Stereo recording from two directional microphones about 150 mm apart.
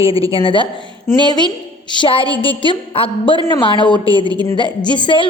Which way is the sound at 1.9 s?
35° left (ahead or behind).